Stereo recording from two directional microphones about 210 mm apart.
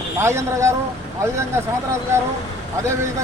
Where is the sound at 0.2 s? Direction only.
15° right (ahead or behind).